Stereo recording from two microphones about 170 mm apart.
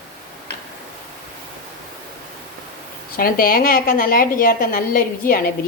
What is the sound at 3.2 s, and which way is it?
A woman's voice, 60° left (ahead or behind).